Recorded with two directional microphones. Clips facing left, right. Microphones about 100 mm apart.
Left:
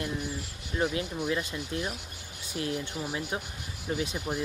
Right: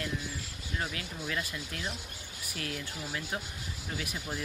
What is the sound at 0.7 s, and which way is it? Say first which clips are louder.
Speech: left 8 dB; 20° left (ahead or behind).